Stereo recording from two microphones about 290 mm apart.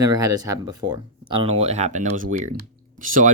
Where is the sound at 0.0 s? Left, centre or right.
Centre.